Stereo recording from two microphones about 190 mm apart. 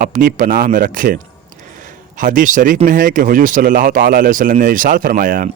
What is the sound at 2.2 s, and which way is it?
Speech, 45° right (ahead or behind).